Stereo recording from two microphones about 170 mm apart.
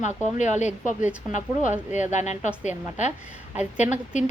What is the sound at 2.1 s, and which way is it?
Speech, 45° left (ahead or behind).